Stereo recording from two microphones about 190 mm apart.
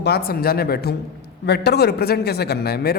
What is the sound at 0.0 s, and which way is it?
A man's voice, 55° left (ahead or behind).